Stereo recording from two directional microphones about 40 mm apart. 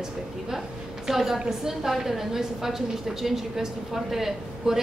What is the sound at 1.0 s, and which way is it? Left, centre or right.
A woman's voice, centre.